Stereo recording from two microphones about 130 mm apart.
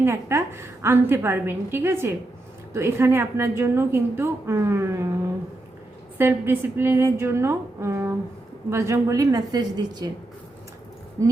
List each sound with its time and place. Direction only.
0.0 s a woman's voice: 20° right (ahead or behind)
6.1 s a woman's voice: 15° right (ahead or behind); by 10.1 s 30° right (ahead or behind)
11.2 s a woman's voice: 25° right (ahead or behind)